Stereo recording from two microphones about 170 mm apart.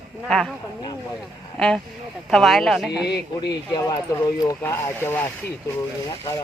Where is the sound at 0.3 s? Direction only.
Centre (ahead or behind).